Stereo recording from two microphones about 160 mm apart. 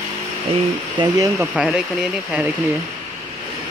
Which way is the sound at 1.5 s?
5° right (ahead or behind).